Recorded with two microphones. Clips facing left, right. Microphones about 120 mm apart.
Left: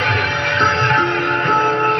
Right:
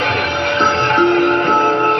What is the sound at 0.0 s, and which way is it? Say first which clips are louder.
Music: right 2 dB; 60° right (ahead or behind).